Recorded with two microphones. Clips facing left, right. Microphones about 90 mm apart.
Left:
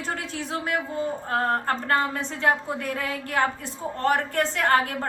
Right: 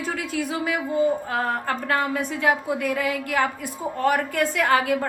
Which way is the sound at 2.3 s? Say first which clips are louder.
Right 1 dB; 35° left (ahead or behind).